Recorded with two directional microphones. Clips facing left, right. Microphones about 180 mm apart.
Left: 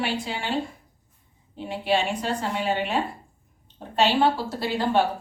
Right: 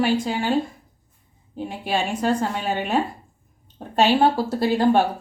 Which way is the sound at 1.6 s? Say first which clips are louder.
Left 1 dB; 45° right (ahead or behind).